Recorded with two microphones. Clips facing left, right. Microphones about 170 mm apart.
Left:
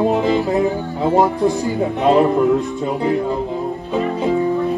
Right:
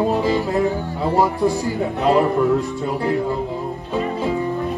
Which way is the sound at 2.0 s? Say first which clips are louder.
Left 3 dB; 20° left (ahead or behind).